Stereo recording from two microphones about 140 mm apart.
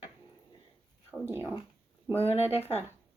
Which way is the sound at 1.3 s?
15° right (ahead or behind).